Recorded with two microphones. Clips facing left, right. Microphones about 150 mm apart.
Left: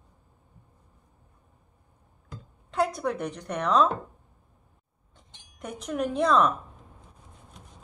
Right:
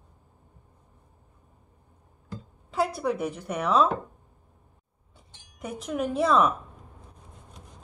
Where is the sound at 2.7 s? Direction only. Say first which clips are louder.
Even; 5° right (ahead or behind).